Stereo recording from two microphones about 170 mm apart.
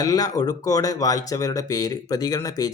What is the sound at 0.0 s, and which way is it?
Speech, 20° left (ahead or behind).